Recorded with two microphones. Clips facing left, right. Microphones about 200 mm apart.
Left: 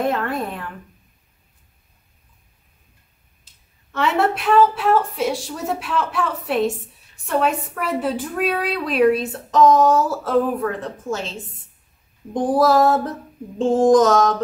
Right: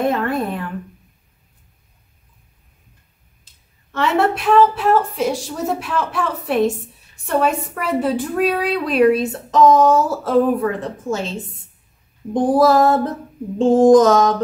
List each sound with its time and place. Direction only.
0.0 s a woman's voice: centre (ahead or behind)
3.9 s a woman's voice: centre (ahead or behind)
12.5 s a woman's voice: centre (ahead or behind)